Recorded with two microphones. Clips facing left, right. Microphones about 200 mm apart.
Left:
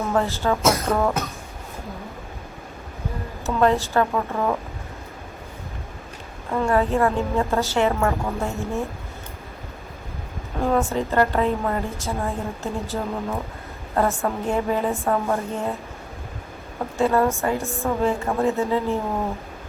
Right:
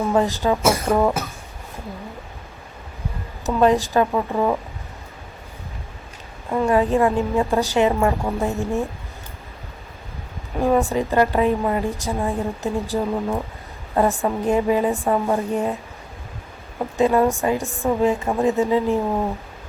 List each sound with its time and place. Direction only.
0.0 s a woman's voice: 15° right (ahead or behind)
3.4 s a woman's voice: 15° right (ahead or behind)
6.5 s a woman's voice: 15° right (ahead or behind)
10.6 s a woman's voice: 15° right (ahead or behind)
17.0 s a woman's voice: 15° right (ahead or behind)